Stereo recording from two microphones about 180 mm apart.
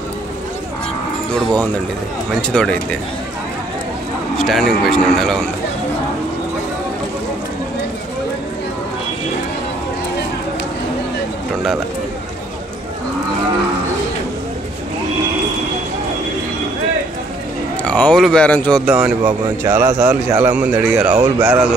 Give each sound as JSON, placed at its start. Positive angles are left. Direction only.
{"t": 1.3, "sound": "a man's voice", "side_deg": 5}
{"t": 4.4, "sound": "a man's voice", "side_deg": 0}
{"t": 17.8, "sound": "speech", "side_deg": 5}
{"t": 18.9, "sound": "speech", "side_deg": -5}
{"t": 21.1, "sound": "speech", "side_deg": -25}